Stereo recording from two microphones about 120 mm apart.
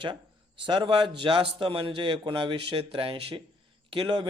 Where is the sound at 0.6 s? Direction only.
40° right (ahead or behind).